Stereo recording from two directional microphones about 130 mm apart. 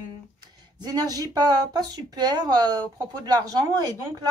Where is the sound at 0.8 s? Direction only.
30° right (ahead or behind).